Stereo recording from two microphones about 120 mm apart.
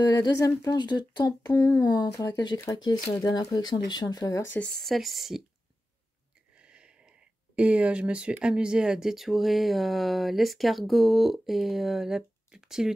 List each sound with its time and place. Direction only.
0.6 s speech: 35° left (ahead or behind)
4.5 s speech: 10° left (ahead or behind)
6.5 s speech: 10° right (ahead or behind)